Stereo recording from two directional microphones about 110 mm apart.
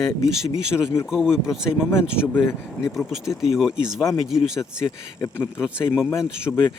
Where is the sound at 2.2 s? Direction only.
15° left (ahead or behind).